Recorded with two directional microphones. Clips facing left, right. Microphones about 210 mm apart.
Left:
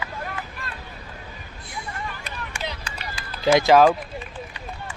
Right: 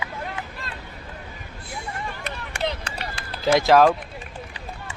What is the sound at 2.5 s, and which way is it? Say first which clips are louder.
Run: right 8 dB; 60° right (ahead or behind).